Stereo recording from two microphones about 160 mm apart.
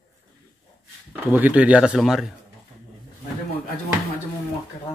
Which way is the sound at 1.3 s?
10° right (ahead or behind).